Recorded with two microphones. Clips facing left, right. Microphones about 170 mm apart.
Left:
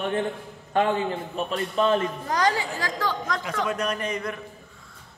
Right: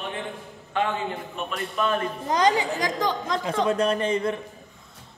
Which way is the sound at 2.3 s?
20° right (ahead or behind).